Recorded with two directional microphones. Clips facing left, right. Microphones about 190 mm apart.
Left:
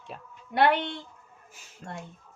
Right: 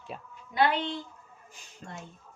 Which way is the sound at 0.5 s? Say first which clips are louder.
Left 3 dB; 65° left (ahead or behind).